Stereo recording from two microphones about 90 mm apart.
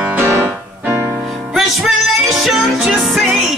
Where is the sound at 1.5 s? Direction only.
5° right (ahead or behind).